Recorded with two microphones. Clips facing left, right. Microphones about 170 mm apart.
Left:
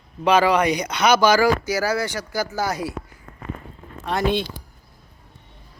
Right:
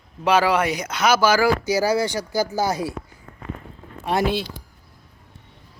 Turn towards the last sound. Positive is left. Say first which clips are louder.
# even
turn(degrees=-5)  # may be behind; listen again after turning